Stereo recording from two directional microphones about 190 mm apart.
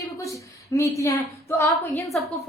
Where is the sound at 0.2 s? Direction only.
15° left (ahead or behind).